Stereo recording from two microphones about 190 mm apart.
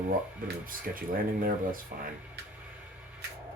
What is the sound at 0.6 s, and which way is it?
Speech, 50° right (ahead or behind).